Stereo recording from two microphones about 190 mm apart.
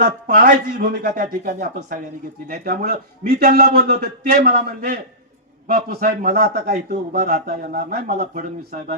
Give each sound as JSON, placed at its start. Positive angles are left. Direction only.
{"t": 0.0, "sound": "a man's voice", "side_deg": -55}
{"t": 3.2, "sound": "a man's voice", "side_deg": -50}